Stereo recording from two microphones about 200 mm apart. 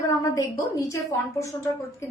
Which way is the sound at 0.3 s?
15° left (ahead or behind).